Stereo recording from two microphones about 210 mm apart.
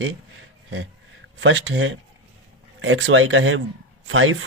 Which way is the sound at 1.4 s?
60° right (ahead or behind).